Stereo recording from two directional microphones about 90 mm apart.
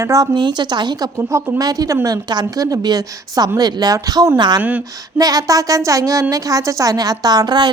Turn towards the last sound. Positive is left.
turn(degrees=-50)  # may be behind; listen again after turning